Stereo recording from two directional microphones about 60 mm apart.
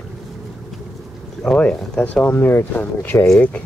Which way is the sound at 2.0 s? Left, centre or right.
Left.